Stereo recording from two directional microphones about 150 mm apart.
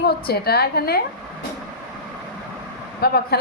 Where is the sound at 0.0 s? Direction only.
90° left.